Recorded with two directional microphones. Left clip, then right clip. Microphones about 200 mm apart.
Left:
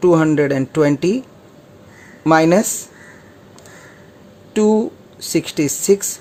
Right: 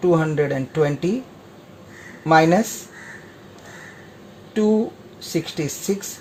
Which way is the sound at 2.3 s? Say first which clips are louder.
Left 3 dB; 40° left (ahead or behind).